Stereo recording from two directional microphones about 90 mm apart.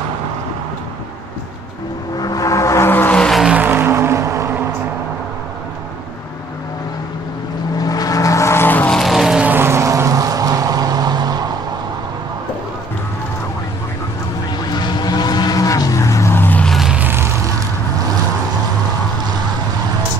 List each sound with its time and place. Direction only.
2.1 s vehicle: 45° left (ahead or behind)
2.9 s music: 20° left (ahead or behind)
3.2 s vehicle: 5° left (ahead or behind)
3.4 s vehicle: 15° right (ahead or behind); by 4.5 s 35° right (ahead or behind)
7.8 s vehicle: 45° left (ahead or behind); by 8.9 s 20° left (ahead or behind)
8.9 s vehicle: centre (ahead or behind)
9.4 s vehicle: 20° right (ahead or behind); by 11.4 s 50° right (ahead or behind)
14.7 s vehicle: 55° left (ahead or behind); by 16.6 s 25° left (ahead or behind)
16.6 s vehicle: centre (ahead or behind)
16.9 s a sound: 20° right (ahead or behind)